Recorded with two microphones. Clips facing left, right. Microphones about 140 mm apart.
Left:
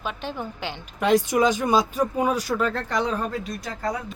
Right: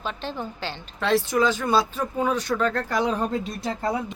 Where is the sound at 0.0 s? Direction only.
10° left (ahead or behind).